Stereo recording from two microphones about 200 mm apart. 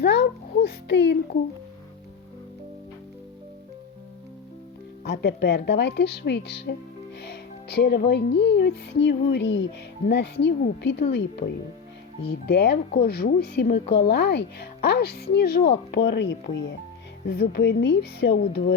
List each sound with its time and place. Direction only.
0.0 s a sound: 55° left (ahead or behind)
5.0 s music: 55° left (ahead or behind)
12.2 s speech: 55° left (ahead or behind)